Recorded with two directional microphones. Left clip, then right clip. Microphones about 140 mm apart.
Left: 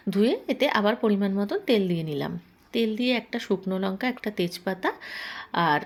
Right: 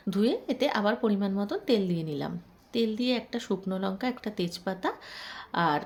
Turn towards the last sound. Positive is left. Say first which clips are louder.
# left 4 dB
turn(degrees=15)  # may be behind; listen again after turning